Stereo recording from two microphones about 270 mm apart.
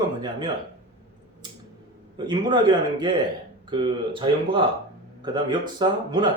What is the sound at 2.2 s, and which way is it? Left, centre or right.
Speech, centre.